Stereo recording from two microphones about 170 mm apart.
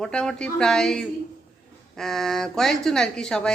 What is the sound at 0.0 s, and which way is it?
A woman's voice, 5° left (ahead or behind).